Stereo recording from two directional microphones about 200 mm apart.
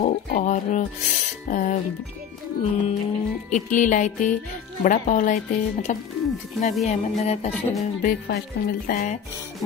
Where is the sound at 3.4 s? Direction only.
40° left (ahead or behind).